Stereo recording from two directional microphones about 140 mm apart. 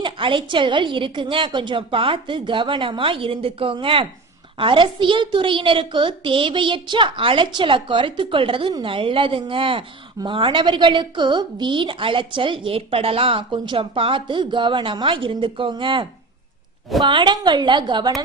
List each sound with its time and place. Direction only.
0.0 s a woman's voice: 35° right (ahead or behind)